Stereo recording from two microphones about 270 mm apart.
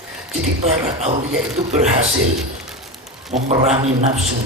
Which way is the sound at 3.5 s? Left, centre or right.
Right.